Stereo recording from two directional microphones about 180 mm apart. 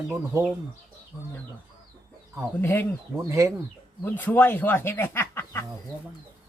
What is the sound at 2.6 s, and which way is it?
Speech, 10° left (ahead or behind).